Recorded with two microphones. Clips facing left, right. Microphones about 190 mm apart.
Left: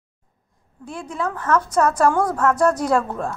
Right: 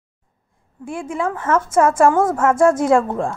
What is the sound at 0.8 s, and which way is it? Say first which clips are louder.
Speech: right 5 dB; 50° right (ahead or behind).